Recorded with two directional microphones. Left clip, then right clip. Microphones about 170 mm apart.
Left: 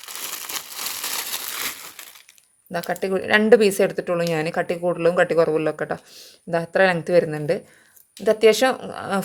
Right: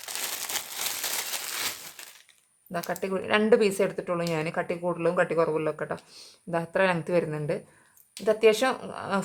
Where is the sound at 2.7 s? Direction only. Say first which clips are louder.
Left 6 dB; 30° left (ahead or behind).